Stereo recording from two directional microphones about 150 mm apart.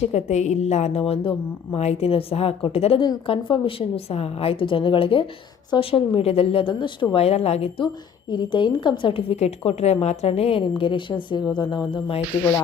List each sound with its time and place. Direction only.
0.0 s a woman's voice: 50° left (ahead or behind)
8.3 s a woman's voice: 30° left (ahead or behind)